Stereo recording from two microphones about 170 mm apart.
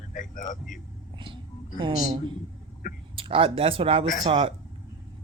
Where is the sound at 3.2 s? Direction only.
30° right (ahead or behind).